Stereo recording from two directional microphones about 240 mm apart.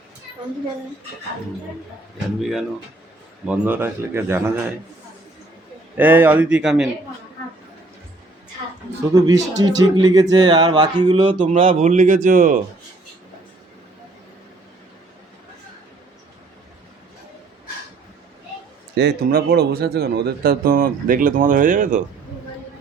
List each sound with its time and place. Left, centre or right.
2.4 s speech: centre
6.0 s speech: centre
9.2 s speech: centre; by 12.6 s right
18.9 s speech: right